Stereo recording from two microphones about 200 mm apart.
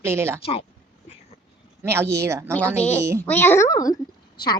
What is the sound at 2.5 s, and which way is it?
A woman's voice, 5° left (ahead or behind).